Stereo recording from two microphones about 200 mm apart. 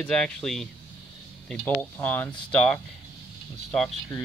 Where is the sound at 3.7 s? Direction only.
Centre (ahead or behind).